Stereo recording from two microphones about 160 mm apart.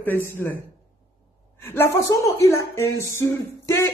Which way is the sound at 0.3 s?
10° left (ahead or behind).